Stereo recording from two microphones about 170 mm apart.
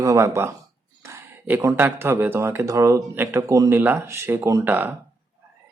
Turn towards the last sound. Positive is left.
turn(degrees=-10)  # may be behind; listen again after turning